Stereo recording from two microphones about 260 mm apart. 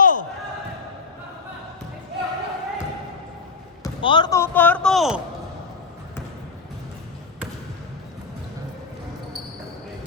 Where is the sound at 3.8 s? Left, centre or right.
Centre.